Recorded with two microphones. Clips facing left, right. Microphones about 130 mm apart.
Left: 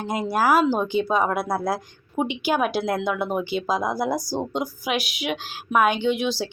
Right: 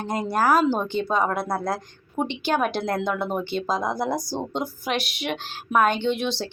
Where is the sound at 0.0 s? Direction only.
5° left (ahead or behind).